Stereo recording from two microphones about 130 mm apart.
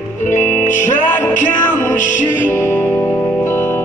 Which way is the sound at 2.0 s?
75° left (ahead or behind).